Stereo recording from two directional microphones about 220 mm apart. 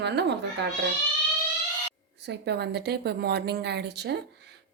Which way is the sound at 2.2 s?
50° right (ahead or behind).